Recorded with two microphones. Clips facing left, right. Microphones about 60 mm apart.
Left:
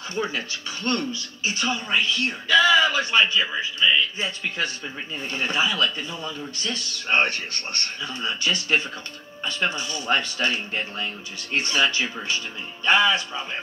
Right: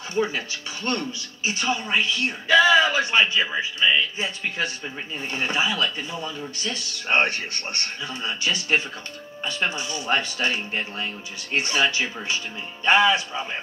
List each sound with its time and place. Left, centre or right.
0.1 s speech: right